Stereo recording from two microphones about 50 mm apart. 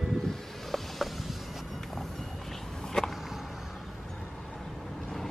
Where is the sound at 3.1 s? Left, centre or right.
Centre.